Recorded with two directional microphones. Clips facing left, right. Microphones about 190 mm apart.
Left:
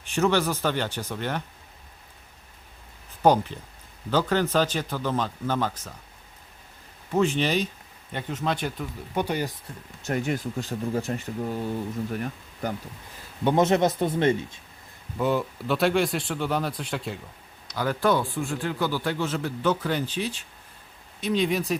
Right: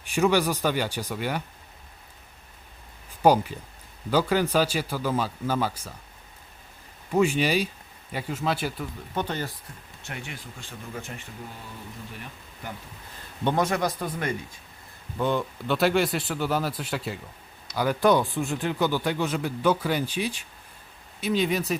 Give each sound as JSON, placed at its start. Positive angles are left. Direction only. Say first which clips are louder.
{"t": 0.1, "sound": "speech", "louder": "right 1 dB", "side_deg": -10}
{"t": 3.2, "sound": "speech", "louder": "even", "side_deg": -10}
{"t": 7.1, "sound": "speech", "louder": "right 1 dB", "side_deg": -10}
{"t": 9.1, "sound": "speech", "louder": "left 3 dB", "side_deg": 10}
{"t": 10.0, "sound": "speech", "louder": "left 12 dB", "side_deg": 40}
{"t": 13.6, "sound": "speech", "louder": "left 7 dB", "side_deg": 25}
{"t": 15.2, "sound": "speech", "louder": "left 1 dB", "side_deg": 5}